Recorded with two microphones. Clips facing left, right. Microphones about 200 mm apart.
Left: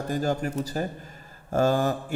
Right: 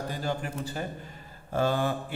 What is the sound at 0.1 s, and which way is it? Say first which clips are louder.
A man's voice: left 10 dB; 45° left (ahead or behind).